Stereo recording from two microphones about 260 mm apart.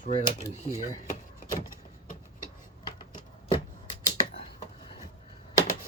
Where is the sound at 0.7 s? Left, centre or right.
Left.